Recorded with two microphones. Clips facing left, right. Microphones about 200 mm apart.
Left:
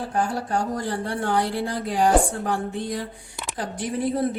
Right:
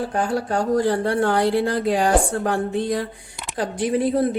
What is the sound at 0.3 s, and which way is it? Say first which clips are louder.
Speech: right 6 dB; 70° right (ahead or behind).